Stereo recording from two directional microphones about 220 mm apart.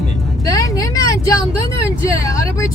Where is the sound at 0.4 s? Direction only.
15° left (ahead or behind).